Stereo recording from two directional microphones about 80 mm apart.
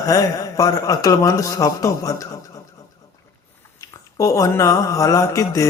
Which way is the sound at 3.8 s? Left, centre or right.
Left.